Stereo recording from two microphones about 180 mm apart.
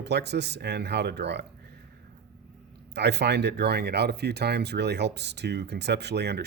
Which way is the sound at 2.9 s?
70° right (ahead or behind).